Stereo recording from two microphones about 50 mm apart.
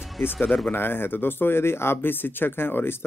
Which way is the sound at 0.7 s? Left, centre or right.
Left.